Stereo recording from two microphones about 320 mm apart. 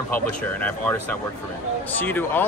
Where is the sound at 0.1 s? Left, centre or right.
Centre.